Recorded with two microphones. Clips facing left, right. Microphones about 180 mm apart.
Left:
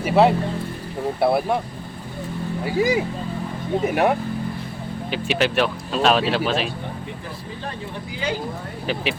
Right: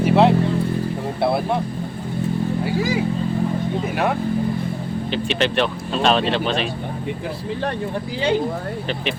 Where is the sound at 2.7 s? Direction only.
20° left (ahead or behind).